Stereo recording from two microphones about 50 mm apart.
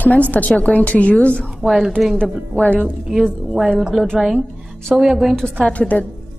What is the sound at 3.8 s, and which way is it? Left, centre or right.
A woman's voice, centre.